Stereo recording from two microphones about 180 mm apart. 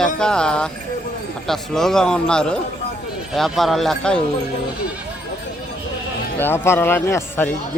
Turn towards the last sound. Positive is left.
turn(degrees=15)  # may be behind; listen again after turning